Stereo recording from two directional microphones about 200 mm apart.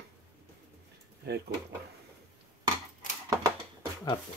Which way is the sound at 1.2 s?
55° right (ahead or behind).